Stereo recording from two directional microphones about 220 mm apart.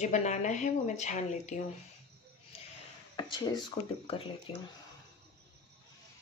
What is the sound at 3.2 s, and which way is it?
A woman's voice, 20° left (ahead or behind).